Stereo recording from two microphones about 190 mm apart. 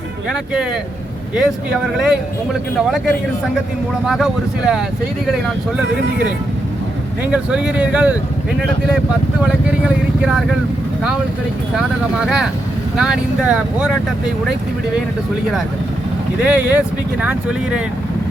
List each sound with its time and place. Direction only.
1.4 s speech: 5° right (ahead or behind)
4.0 s speech: centre (ahead or behind)
7.3 s speech: 5° right (ahead or behind)
9.4 s speech: 5° right (ahead or behind)
11.8 s speech: centre (ahead or behind)
16.4 s speech: 10° right (ahead or behind)